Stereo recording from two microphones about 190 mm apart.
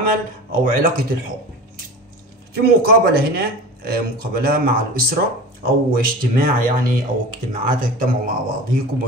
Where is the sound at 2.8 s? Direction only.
55° right (ahead or behind).